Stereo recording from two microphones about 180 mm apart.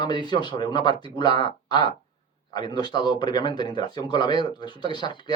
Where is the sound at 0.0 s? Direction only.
25° left (ahead or behind).